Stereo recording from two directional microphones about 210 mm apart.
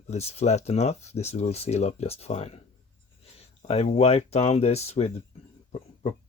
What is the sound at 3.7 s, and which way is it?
Speech, 30° left (ahead or behind).